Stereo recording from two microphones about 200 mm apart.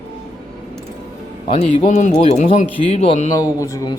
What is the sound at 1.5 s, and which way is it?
Speech, 35° left (ahead or behind).